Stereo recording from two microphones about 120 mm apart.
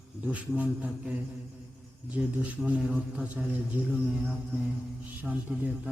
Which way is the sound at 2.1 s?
10° right (ahead or behind).